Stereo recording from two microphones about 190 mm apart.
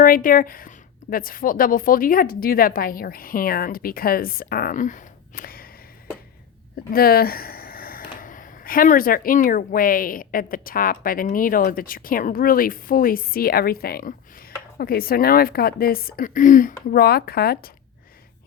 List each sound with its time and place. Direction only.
0.0 s speech: 45° left (ahead or behind)
6.9 s speech: 50° left (ahead or behind)